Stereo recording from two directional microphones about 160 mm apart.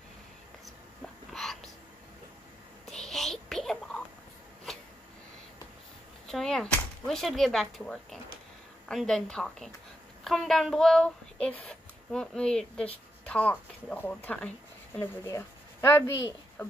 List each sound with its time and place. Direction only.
1.0 s hiccup: centre (ahead or behind)
2.9 s whispering: 5° left (ahead or behind)
6.2 s a woman's voice: centre (ahead or behind); by 16.0 s 20° left (ahead or behind)